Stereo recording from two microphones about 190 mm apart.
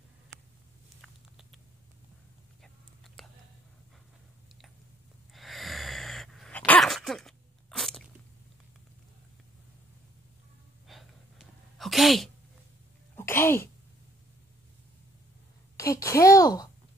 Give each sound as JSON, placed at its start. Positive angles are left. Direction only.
{"t": 1.0, "sound": "patter", "side_deg": 0}
{"t": 2.6, "sound": "whispering", "side_deg": 0}
{"t": 5.3, "sound": "sneeze", "side_deg": 0}
{"t": 10.9, "sound": "sneeze", "side_deg": 0}
{"t": 13.1, "sound": "sneeze", "side_deg": 15}
{"t": 15.7, "sound": "a sound", "side_deg": 15}